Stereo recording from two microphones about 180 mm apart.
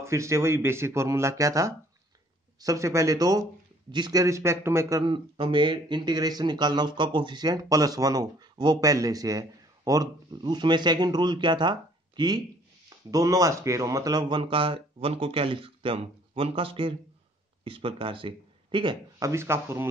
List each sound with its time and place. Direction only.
0.0 s speech: 15° right (ahead or behind)